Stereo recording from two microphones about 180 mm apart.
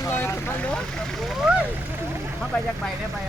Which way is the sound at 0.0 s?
15° left (ahead or behind).